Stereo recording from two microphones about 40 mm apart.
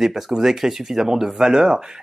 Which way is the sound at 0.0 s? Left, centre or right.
Centre.